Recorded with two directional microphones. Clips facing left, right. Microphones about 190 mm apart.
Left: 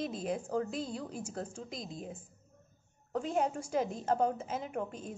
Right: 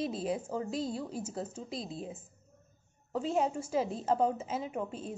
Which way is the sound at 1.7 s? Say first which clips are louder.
Right 3 dB; 30° right (ahead or behind).